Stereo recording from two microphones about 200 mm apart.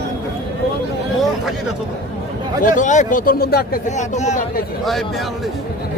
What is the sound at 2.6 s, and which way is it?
Speech, 40° left (ahead or behind).